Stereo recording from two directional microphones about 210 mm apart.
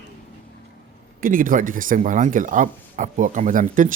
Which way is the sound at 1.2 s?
40° right (ahead or behind).